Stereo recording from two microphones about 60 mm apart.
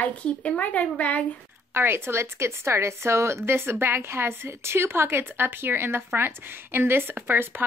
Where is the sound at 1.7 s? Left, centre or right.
Right.